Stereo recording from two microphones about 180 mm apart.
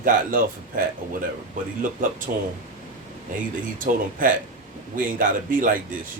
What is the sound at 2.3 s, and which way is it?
Speech, 50° right (ahead or behind).